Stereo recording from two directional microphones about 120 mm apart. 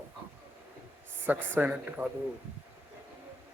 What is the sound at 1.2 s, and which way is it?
Speech, 15° right (ahead or behind).